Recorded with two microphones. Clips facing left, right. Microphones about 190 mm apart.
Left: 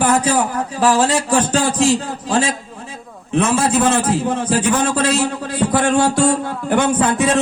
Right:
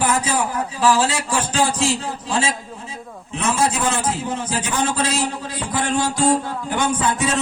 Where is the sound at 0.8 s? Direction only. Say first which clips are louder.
Left 3 dB; 45° left (ahead or behind).